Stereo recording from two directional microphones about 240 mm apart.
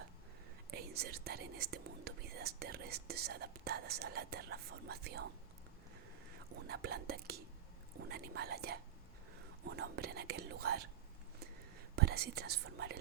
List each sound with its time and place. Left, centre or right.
0.7 s speech: right
6.7 s speech: right
11.9 s speech: right